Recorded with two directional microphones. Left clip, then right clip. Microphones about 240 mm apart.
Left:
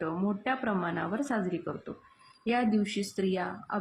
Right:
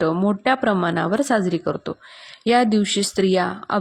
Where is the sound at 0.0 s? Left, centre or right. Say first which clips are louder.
Right 13 dB; right.